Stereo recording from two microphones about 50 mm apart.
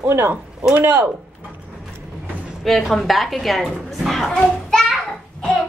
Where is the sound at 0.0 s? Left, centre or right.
Right.